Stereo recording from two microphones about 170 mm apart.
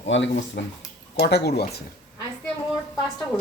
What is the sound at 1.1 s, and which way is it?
Speech, 75° left (ahead or behind).